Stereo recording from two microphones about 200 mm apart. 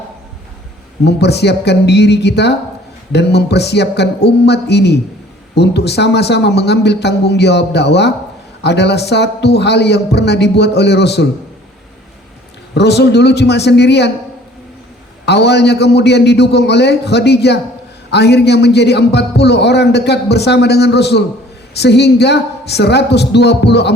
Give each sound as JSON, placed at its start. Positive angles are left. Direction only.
{"t": 1.0, "sound": "a man's voice", "side_deg": 55}
{"t": 12.7, "sound": "a man's voice", "side_deg": 55}
{"t": 15.3, "sound": "a man's voice", "side_deg": 55}